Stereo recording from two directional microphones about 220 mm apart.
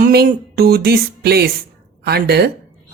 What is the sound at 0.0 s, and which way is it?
A woman's voice, 40° right (ahead or behind).